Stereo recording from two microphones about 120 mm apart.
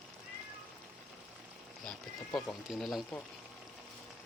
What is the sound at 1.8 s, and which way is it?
Speech, 5° left (ahead or behind).